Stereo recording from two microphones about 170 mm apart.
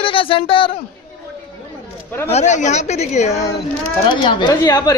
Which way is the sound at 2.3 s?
45° left (ahead or behind).